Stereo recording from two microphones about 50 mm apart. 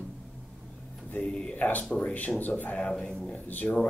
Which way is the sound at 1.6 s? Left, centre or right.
Left.